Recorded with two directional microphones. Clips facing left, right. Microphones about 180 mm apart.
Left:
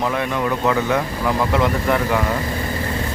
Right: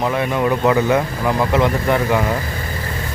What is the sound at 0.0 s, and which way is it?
Speech, 10° right (ahead or behind).